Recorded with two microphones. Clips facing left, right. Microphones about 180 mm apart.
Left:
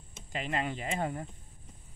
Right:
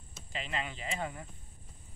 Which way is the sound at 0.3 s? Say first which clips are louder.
Left 5 dB; 50° left (ahead or behind).